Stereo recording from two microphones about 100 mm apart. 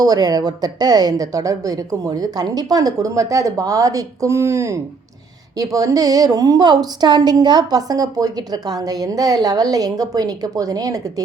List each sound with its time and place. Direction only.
0.0 s a woman's voice: 40° right (ahead or behind)